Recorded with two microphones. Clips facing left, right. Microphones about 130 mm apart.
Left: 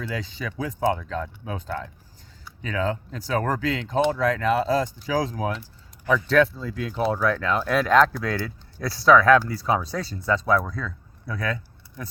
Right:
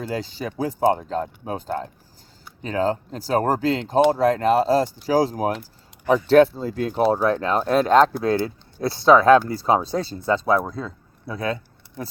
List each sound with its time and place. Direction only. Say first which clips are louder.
0.1 s speech: right 4 dB; 35° right (ahead or behind)
6.7 s speech: right 5 dB; 45° right (ahead or behind)
7.2 s speech: right 3 dB; 30° right (ahead or behind)